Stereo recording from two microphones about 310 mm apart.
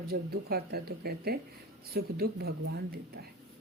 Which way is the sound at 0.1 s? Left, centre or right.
Right.